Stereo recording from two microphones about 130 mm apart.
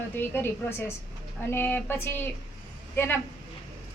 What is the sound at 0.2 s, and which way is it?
A woman's voice, 15° left (ahead or behind).